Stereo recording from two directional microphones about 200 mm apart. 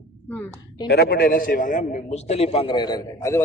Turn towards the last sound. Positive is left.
turn(degrees=15)  # may be behind; listen again after turning